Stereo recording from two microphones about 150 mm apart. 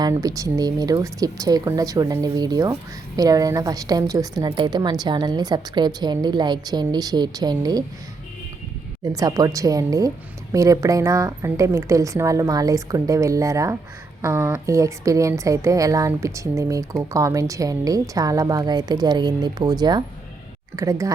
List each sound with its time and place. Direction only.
0.0 s a woman's voice: 25° right (ahead or behind)
9.1 s a woman's voice: 25° right (ahead or behind)